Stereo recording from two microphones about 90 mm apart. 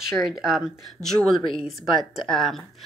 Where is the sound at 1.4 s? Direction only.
80° left.